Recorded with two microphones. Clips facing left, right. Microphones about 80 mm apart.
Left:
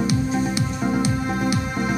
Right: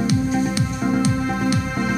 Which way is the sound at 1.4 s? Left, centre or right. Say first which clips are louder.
Right 1 dB; centre.